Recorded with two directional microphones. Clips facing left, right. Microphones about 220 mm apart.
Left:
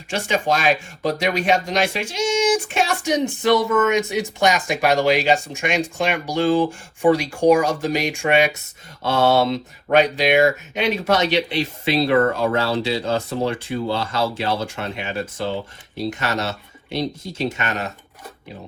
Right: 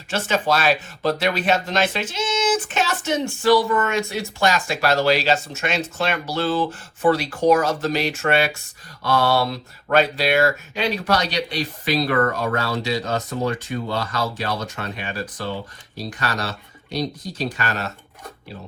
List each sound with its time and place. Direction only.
0.1 s speech: 15° left (ahead or behind)